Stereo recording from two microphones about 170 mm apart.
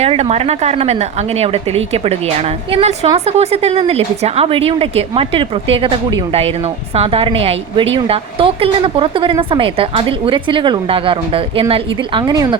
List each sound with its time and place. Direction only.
0.0 s a woman's voice: 40° right (ahead or behind)